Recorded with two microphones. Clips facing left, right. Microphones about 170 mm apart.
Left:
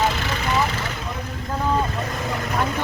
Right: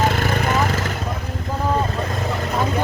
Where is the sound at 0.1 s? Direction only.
50° right (ahead or behind).